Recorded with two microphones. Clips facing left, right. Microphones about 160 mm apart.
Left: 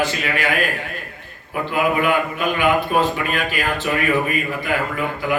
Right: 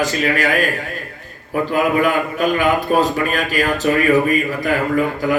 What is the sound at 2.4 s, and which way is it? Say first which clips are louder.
A man's voice: right 4 dB; 40° right (ahead or behind).